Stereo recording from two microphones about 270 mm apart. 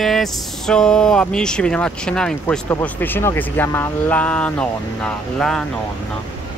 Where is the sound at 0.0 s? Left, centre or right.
Centre.